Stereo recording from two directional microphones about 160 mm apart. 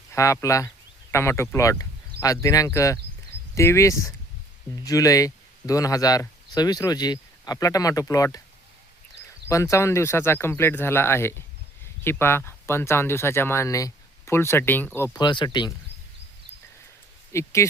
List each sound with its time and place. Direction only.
0.1 s speech: 20° left (ahead or behind)
9.5 s speech: 20° left (ahead or behind)
15.2 s speech: 30° left (ahead or behind)
17.3 s speech: 20° left (ahead or behind)